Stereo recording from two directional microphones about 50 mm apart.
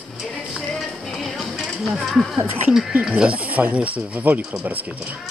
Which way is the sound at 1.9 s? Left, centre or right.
Centre.